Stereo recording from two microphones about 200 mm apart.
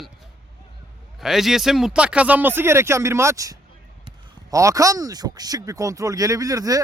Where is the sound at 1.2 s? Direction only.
Centre (ahead or behind).